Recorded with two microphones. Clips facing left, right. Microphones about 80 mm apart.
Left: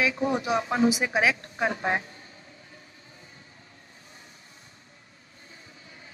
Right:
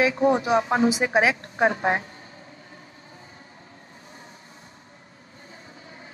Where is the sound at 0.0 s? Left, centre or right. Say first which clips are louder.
Right 6 dB; right.